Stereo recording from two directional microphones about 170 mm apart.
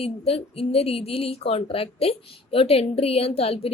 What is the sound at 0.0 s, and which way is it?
Speech, 35° left (ahead or behind).